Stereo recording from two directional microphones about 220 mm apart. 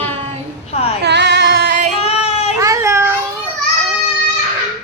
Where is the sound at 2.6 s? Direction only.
15° right (ahead or behind).